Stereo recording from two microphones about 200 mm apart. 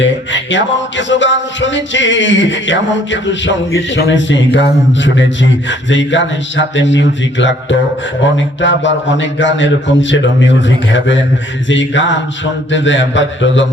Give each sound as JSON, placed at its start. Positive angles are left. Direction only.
{"t": 0.0, "sound": "a man's voice", "side_deg": 65}